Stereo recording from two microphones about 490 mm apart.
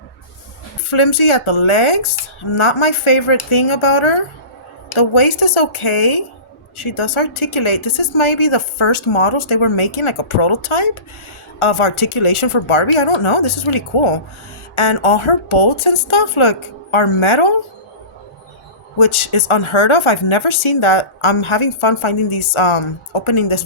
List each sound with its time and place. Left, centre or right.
0.9 s a woman's voice: left
18.9 s speech: left